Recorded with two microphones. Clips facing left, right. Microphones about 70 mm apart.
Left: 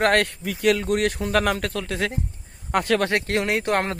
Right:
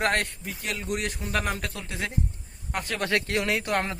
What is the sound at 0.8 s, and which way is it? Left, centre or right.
Speech, left.